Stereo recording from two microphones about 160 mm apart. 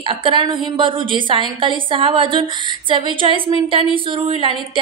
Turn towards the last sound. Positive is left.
turn(degrees=-35)  # may be behind; listen again after turning